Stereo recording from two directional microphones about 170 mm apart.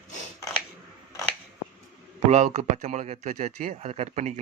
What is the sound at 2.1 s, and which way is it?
Speech, 40° right (ahead or behind).